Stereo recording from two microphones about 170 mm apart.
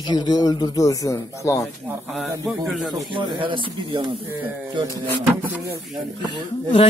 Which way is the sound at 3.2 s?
30° right (ahead or behind).